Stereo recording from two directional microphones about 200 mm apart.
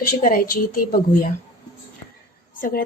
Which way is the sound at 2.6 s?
45° left (ahead or behind).